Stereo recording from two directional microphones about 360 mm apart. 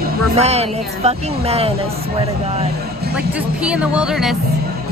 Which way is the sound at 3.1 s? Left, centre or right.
Centre.